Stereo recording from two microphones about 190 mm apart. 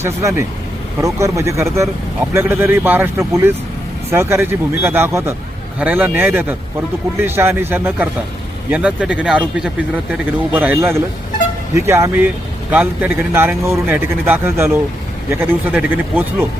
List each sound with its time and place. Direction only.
0.0 s speech: 15° right (ahead or behind)